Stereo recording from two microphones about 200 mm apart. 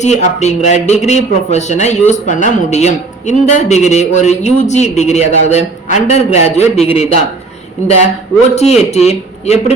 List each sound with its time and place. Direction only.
0.0 s a man's voice: 35° left (ahead or behind)
8.5 s a man's voice: 35° left (ahead or behind)